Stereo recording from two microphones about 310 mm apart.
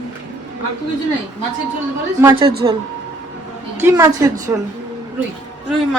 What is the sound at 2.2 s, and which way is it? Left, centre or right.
Speech, centre.